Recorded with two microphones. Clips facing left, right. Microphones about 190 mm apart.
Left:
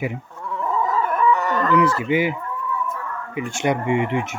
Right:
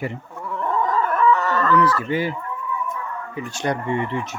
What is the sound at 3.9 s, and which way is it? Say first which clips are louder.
Speech: left 3 dB; 15° left (ahead or behind).